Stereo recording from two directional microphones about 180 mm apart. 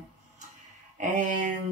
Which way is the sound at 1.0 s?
45° right (ahead or behind).